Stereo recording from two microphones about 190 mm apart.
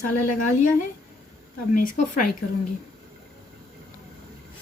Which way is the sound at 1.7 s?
45° left (ahead or behind).